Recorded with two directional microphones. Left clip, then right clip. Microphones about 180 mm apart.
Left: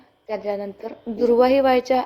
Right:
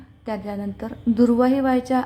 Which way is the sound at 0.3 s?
20° left (ahead or behind).